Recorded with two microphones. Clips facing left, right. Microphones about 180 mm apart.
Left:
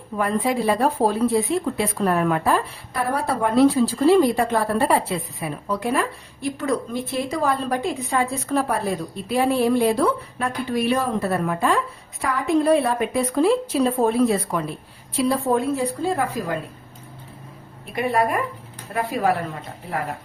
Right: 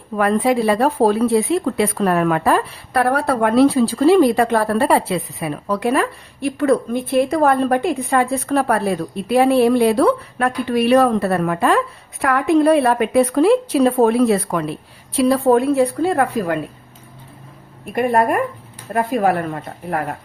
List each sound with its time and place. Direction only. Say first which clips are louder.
0.2 s speech: right 6 dB; 75° right (ahead or behind)
17.9 s a woman's voice: right 5 dB; 50° right (ahead or behind)